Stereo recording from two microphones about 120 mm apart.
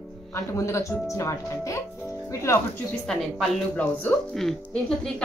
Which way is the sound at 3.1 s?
5° left (ahead or behind).